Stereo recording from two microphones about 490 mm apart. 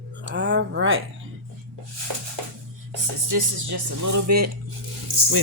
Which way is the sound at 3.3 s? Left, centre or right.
Right.